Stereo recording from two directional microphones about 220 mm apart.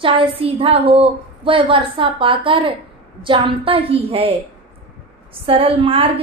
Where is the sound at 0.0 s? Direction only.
25° right (ahead or behind).